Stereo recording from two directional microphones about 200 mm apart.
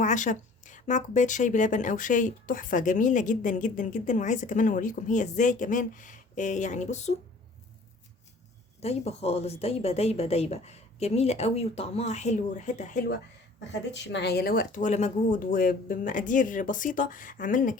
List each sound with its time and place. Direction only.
0.0 s speech: 40° left (ahead or behind)
8.8 s speech: 30° left (ahead or behind)
13.9 s speech: 60° left (ahead or behind); by 17.7 s 40° left (ahead or behind)